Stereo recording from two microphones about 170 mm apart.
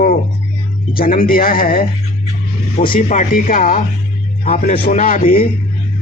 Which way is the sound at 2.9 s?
50° left (ahead or behind).